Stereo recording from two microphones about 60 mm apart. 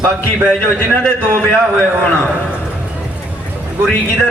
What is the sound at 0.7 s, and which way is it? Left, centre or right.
Speech, left.